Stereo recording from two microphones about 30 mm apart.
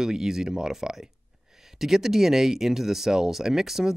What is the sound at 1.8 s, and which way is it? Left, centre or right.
Speech, centre.